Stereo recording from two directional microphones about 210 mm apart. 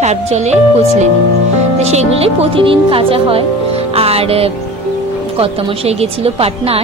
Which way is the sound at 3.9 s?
30° right (ahead or behind).